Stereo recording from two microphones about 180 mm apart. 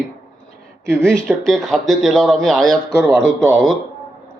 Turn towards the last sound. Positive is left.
turn(degrees=0)  # may be behind; listen again after turning